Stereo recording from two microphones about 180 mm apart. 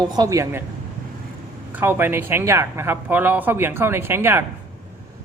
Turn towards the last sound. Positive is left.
turn(degrees=-15)  # may be behind; listen again after turning